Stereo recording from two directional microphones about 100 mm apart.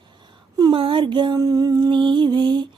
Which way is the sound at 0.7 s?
60° right (ahead or behind).